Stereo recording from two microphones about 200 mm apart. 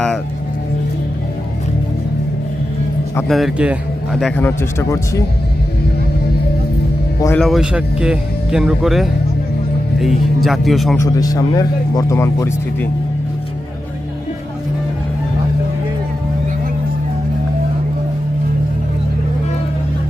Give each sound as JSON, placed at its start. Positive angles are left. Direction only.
{"t": 3.2, "sound": "speech", "side_deg": 0}
{"t": 4.4, "sound": "speech", "side_deg": 15}
{"t": 7.2, "sound": "speech", "side_deg": 10}
{"t": 7.4, "sound": "speech", "side_deg": 0}
{"t": 10.9, "sound": "speech", "side_deg": 15}